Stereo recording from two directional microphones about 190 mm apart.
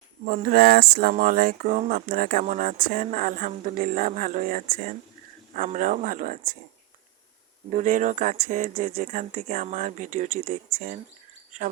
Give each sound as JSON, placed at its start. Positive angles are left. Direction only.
{"t": 0.3, "sound": "speech", "side_deg": -50}
{"t": 7.7, "sound": "speech", "side_deg": -40}